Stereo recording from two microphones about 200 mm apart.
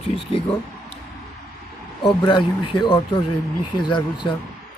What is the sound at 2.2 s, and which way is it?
Speech, 25° left (ahead or behind).